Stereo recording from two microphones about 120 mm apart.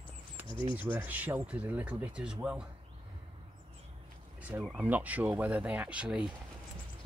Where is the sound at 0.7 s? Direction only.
15° right (ahead or behind).